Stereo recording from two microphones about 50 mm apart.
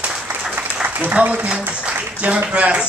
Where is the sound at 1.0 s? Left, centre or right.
Right.